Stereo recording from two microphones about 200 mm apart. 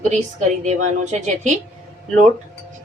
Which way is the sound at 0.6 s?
35° right (ahead or behind).